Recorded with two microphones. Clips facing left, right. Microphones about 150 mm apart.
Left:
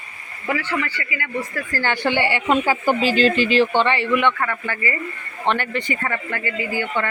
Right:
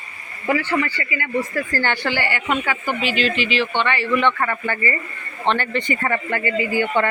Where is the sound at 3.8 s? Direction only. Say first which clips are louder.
Left 2 dB; 25° left (ahead or behind).